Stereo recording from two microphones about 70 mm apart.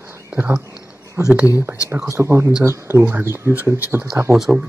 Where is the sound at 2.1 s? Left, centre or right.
Right.